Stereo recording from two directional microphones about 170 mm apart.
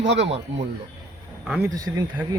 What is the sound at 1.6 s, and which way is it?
Speech, 20° right (ahead or behind).